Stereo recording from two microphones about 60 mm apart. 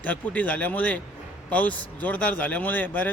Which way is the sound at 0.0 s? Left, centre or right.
Left.